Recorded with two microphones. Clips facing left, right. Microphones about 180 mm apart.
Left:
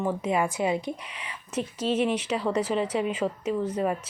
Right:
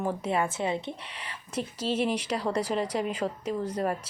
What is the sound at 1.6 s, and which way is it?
Speech, 35° right (ahead or behind).